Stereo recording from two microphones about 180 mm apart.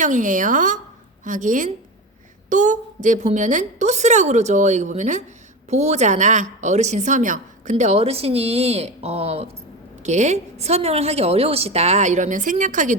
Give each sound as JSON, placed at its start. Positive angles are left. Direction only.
{"t": 0.0, "sound": "a woman's voice", "side_deg": -45}